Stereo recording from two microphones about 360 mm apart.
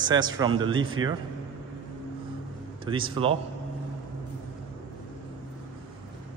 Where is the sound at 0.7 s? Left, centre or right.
Right.